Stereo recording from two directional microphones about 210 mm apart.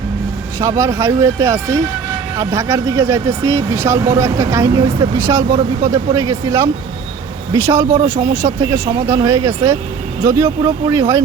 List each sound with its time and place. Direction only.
0.6 s speech: 15° right (ahead or behind)